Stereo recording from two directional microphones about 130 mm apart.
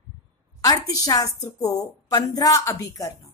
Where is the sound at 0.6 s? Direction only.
30° left (ahead or behind).